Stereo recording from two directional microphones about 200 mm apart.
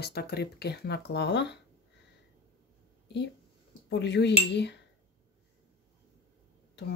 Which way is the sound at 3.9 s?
60° left (ahead or behind).